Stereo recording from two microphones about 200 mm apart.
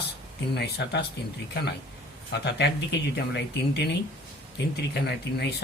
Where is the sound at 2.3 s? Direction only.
55° left (ahead or behind).